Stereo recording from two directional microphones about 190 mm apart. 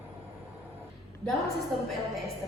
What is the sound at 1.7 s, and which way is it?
Music, centre (ahead or behind).